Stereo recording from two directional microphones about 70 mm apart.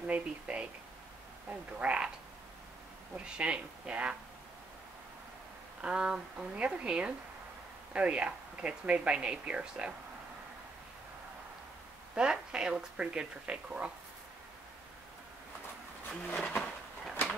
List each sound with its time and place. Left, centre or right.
0.0 s speech: centre
3.2 s speech: centre
5.8 s speech: centre
12.2 s speech: centre
16.3 s speech: centre